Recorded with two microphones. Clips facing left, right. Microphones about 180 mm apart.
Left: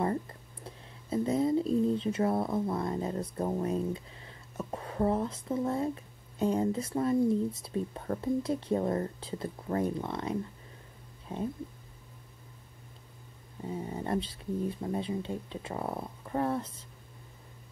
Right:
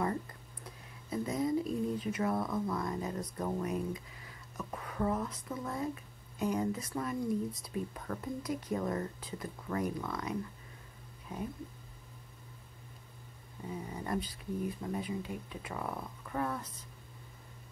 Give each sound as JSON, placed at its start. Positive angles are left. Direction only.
{"t": 0.7, "sound": "speech", "side_deg": 30}
{"t": 13.7, "sound": "speech", "side_deg": 30}